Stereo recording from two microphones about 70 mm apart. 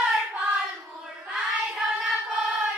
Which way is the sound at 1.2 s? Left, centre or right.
Centre.